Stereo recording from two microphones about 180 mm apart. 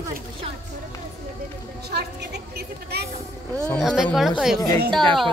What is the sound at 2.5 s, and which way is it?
Vehicle, 60° right (ahead or behind).